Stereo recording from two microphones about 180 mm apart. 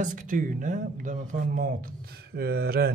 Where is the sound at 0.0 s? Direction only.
45° right (ahead or behind).